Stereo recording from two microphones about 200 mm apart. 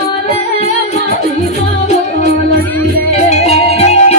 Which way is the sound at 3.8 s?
30° left (ahead or behind).